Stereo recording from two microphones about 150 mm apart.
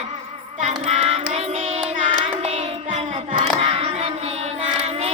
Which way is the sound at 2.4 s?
45° right (ahead or behind).